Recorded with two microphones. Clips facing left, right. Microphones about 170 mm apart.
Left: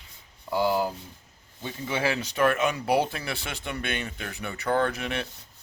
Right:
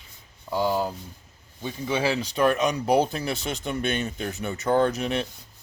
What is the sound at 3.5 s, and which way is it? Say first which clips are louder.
Speech: right 4 dB; 20° right (ahead or behind).